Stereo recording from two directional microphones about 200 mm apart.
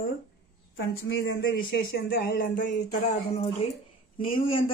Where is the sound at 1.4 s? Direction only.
50° left (ahead or behind).